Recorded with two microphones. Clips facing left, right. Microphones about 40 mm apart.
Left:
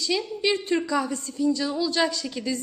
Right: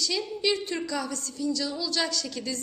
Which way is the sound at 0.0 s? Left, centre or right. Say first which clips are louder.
Left 3 dB; centre.